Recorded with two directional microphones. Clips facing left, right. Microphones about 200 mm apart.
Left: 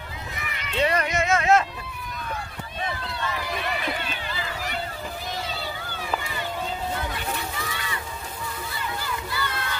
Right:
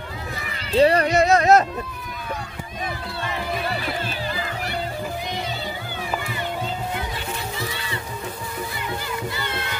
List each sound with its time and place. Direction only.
0.4 s speech: 35° right (ahead or behind)
3.6 s music: 35° right (ahead or behind)
7.5 s crowd: 30° right (ahead or behind)
9.3 s music: 20° right (ahead or behind)